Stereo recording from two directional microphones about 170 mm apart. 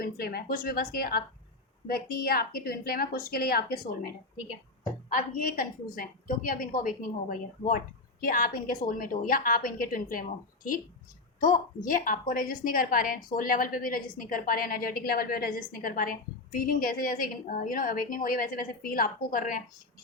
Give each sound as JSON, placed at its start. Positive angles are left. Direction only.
{"t": 0.0, "sound": "a woman's voice", "side_deg": 60}
{"t": 5.1, "sound": "a woman's voice", "side_deg": 55}
{"t": 11.9, "sound": "a woman's voice", "side_deg": 55}